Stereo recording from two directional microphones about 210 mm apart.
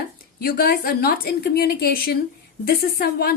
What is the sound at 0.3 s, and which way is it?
A woman's voice, 45° left (ahead or behind).